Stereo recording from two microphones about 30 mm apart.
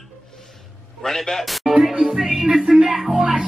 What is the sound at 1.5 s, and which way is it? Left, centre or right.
Music, centre.